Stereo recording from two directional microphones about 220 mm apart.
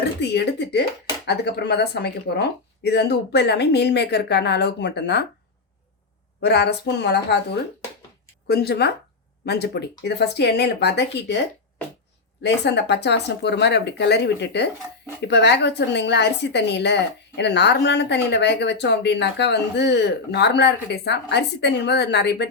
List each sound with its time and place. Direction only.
0.2 s a woman's voice: 50° left (ahead or behind)
6.4 s a woman's voice: 50° left (ahead or behind)
8.4 s a woman's voice: 45° left (ahead or behind)